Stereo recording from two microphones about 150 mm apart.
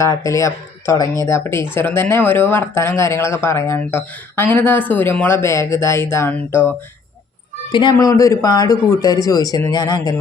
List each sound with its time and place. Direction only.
0.0 s speech: 20° left (ahead or behind)
7.7 s speech: 30° left (ahead or behind)